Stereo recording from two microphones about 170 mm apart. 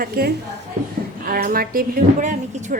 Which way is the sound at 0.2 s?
60° right (ahead or behind).